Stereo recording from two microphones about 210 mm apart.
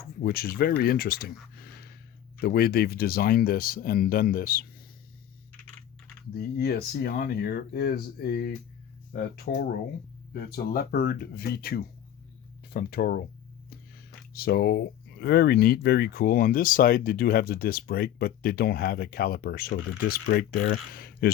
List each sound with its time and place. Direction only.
0.2 s speech: 45° left (ahead or behind)
6.3 s speech: 50° left (ahead or behind)
14.3 s speech: 50° left (ahead or behind)